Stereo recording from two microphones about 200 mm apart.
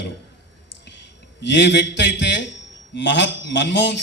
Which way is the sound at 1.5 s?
60° left (ahead or behind).